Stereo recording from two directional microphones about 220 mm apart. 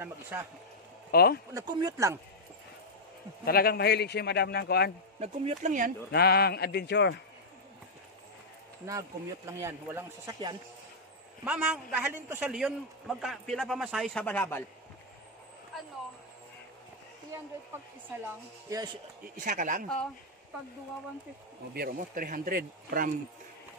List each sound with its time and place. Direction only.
0.0 s a man's voice: 10° right (ahead or behind)
1.1 s a man's voice: 45° left (ahead or behind)
1.5 s a man's voice: 15° right (ahead or behind)
3.4 s a man's voice: 45° left (ahead or behind)
5.2 s speech: 30° right (ahead or behind)
6.1 s a man's voice: 45° left (ahead or behind)
8.8 s a man's voice: 10° right (ahead or behind); by 14.6 s 10° left (ahead or behind)
18.2 s a man's voice: 15° right (ahead or behind)
19.3 s speech: 35° right (ahead or behind)
21.7 s speech: 45° right (ahead or behind)